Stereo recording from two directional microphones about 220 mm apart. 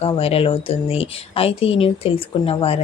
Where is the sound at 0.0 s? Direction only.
25° left (ahead or behind).